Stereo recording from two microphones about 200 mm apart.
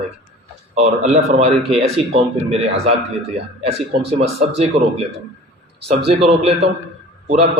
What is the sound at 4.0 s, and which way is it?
A man's voice, 30° right (ahead or behind).